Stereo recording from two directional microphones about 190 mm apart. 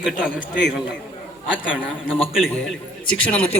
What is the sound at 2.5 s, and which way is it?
Speech, 5° left (ahead or behind).